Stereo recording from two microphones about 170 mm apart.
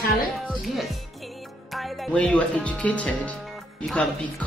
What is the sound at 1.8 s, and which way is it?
Speech, 5° left (ahead or behind).